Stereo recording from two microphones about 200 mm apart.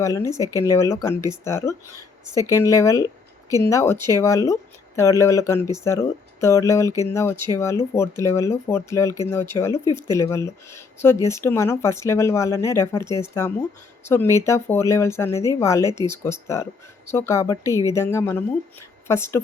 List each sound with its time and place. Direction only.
0.0 s speech: 15° left (ahead or behind)